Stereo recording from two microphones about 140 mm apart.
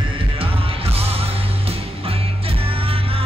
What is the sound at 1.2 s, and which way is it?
Music, 45° right (ahead or behind).